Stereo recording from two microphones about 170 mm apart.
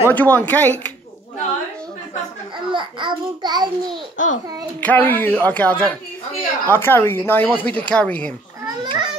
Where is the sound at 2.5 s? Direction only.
30° right (ahead or behind).